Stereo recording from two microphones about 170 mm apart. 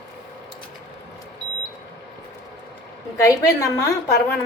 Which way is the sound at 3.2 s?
20° left (ahead or behind).